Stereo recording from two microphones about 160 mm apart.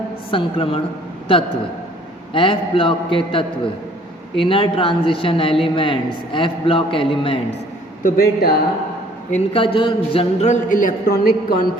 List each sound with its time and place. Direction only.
0.3 s a man's voice: 35° left (ahead or behind)
2.3 s a man's voice: 30° left (ahead or behind)
8.0 s a man's voice: 65° left (ahead or behind)
9.3 s a man's voice: 35° left (ahead or behind); by 11.5 s 70° left (ahead or behind)